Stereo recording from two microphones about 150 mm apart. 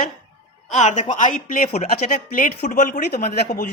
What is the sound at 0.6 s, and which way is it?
Speech, 55° left (ahead or behind).